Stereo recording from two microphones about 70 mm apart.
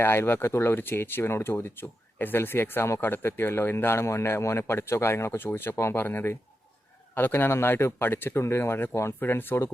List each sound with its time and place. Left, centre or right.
0.0 s speech: left